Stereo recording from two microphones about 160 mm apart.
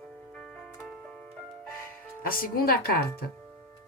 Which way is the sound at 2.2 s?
65° left (ahead or behind).